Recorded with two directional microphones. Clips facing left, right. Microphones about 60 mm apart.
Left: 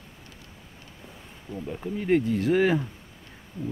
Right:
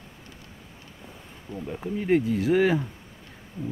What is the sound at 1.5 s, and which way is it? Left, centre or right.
Speech, centre.